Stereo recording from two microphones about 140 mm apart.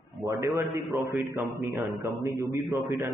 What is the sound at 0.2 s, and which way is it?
A man's voice, 25° right (ahead or behind).